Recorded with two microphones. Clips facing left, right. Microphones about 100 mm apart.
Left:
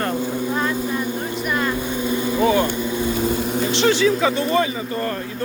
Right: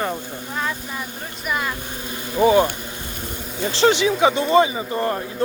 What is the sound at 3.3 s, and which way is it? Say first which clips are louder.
Vehicle: left 11 dB; 80° left.